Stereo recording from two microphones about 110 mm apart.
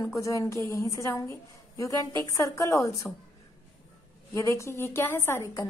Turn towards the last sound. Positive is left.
turn(degrees=30)  # may be behind; listen again after turning